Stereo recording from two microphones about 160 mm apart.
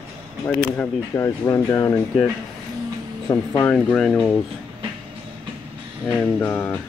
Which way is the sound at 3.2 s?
15° left (ahead or behind).